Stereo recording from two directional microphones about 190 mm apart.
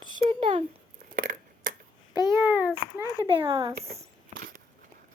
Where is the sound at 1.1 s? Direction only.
45° right (ahead or behind).